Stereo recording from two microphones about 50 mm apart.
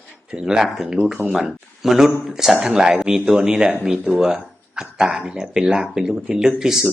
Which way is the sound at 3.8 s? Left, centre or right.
Centre.